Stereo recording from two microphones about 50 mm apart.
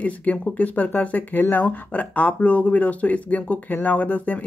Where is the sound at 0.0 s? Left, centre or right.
Left.